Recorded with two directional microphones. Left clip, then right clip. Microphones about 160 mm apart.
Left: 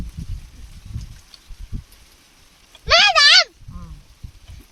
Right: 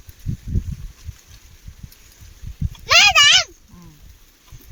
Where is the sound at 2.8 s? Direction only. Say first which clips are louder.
Right 1 dB; 20° left (ahead or behind).